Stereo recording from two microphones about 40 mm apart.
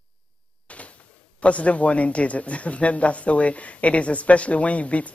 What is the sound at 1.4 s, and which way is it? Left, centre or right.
Speech, left.